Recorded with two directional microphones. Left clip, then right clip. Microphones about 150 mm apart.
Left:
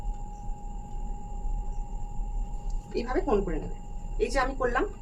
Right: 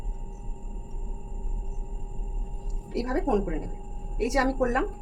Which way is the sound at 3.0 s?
30° right (ahead or behind).